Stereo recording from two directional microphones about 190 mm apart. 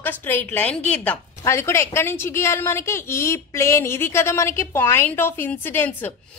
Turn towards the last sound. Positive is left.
turn(degrees=10)  # may be behind; listen again after turning